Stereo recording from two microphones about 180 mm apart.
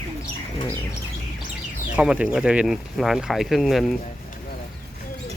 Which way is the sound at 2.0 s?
5° right (ahead or behind).